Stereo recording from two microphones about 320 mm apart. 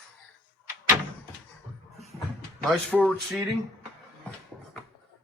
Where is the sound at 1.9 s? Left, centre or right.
Centre.